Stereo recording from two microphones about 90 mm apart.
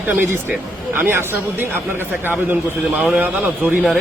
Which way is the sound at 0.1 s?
25° right (ahead or behind).